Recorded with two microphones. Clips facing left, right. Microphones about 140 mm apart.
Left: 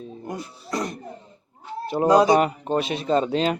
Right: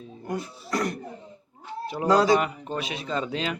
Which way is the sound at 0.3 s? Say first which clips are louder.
Right 2 dB; 20° left (ahead or behind).